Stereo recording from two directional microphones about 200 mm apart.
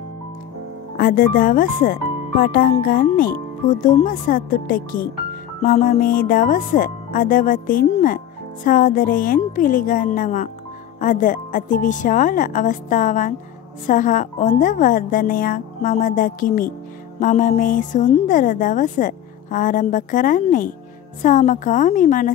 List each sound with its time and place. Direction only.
0.9 s a woman's voice: 45° left (ahead or behind)